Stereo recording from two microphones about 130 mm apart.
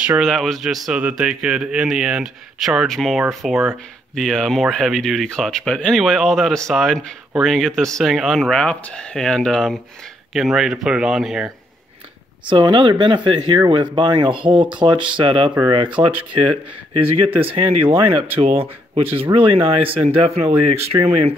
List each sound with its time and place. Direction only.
0.2 s speech: centre (ahead or behind)
12.4 s speech: 40° right (ahead or behind)